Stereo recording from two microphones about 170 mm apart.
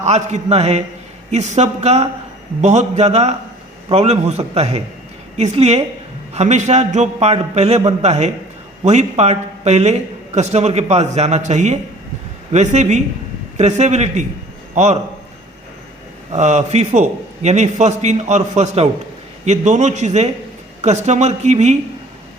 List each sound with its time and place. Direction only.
0.0 s a man's voice: 40° right (ahead or behind)
16.3 s a man's voice: 45° right (ahead or behind)